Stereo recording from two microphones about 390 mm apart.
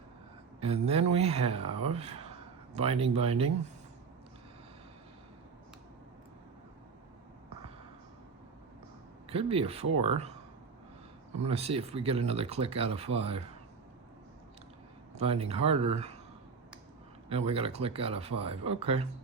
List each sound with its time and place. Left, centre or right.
0.6 s speech: centre
9.2 s speech: centre
11.3 s speech: centre
15.1 s speech: centre
17.2 s speech: centre